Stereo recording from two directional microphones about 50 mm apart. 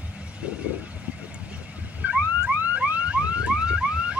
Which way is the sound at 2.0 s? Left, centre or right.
Centre.